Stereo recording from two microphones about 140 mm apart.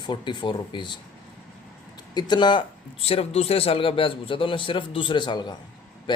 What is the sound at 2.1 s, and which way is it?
A man's voice, 30° left (ahead or behind).